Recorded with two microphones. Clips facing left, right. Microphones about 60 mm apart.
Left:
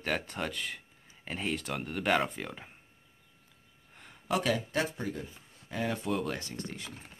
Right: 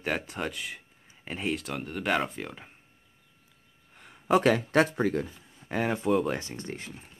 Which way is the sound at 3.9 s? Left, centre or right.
Centre.